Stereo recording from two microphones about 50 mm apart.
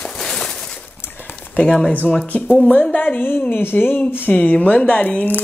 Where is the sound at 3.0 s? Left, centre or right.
Left.